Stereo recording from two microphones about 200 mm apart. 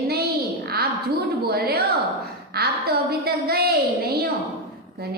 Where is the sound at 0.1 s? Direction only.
50° right (ahead or behind).